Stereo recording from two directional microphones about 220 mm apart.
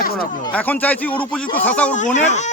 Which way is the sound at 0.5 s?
5° left (ahead or behind).